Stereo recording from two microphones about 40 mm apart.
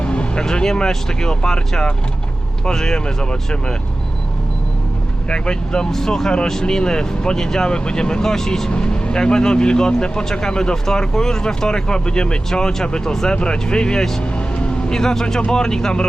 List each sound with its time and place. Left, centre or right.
0.0 s vehicle: left
0.4 s speech: centre
5.3 s speech: centre
8.7 s speech: left
14.2 s vehicle: left
15.4 s speech: centre